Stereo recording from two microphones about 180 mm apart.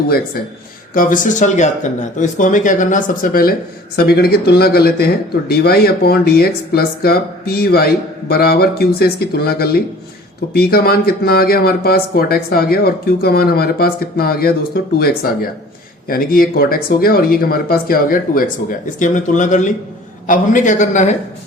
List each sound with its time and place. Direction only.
0.9 s speech: 45° left (ahead or behind)
3.9 s speech: 60° left (ahead or behind); by 21.2 s 40° left (ahead or behind)